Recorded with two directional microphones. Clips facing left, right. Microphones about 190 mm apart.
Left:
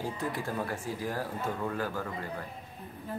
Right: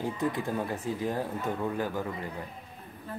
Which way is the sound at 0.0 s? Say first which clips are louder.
Right 4 dB; 20° right (ahead or behind).